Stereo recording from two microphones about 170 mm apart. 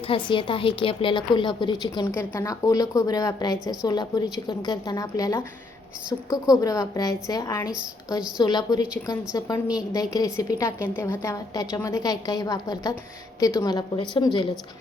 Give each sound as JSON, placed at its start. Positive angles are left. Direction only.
{"t": 0.1, "sound": "a woman's voice", "side_deg": 30}